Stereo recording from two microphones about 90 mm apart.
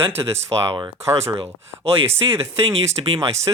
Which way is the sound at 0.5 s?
65° right (ahead or behind).